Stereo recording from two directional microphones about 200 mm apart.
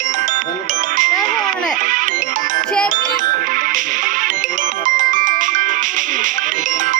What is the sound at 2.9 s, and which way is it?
Music, 40° right (ahead or behind).